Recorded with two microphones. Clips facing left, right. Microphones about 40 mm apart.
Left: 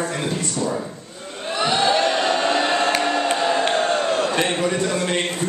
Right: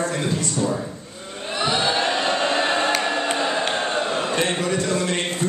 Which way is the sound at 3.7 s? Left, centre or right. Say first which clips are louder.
Left 3 dB; right.